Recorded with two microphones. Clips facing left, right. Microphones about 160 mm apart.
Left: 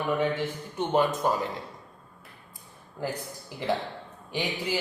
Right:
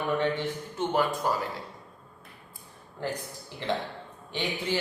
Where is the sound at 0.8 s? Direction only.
20° left (ahead or behind).